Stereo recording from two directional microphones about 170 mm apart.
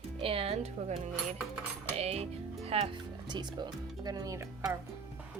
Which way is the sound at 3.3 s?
25° right (ahead or behind).